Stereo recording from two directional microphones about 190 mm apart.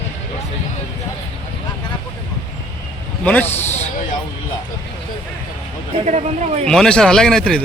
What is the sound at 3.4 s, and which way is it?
Speech, 35° left (ahead or behind).